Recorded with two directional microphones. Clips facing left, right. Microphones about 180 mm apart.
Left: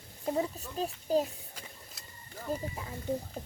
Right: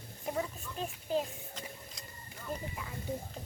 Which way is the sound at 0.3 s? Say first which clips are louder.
Left 5 dB; 30° left (ahead or behind).